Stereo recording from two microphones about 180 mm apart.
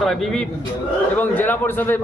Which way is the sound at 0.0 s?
Centre (ahead or behind).